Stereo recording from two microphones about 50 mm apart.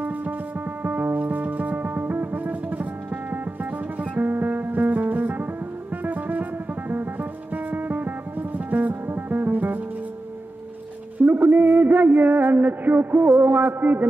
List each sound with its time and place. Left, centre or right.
0.8 s music: right
4.0 s music: right
11.1 s music: right